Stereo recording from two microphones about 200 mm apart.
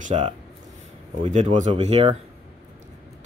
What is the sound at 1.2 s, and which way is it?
Speech, 35° right (ahead or behind).